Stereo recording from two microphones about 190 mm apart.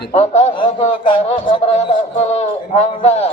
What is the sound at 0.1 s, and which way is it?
Speech, 35° left (ahead or behind).